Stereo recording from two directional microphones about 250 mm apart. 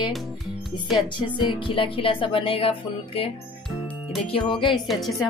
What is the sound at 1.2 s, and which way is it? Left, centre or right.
Music, centre.